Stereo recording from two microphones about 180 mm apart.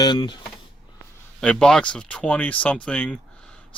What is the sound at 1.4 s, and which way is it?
Speech, 5° left (ahead or behind).